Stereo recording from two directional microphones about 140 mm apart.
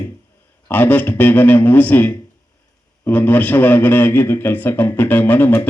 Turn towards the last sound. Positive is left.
turn(degrees=15)  # may be behind; listen again after turning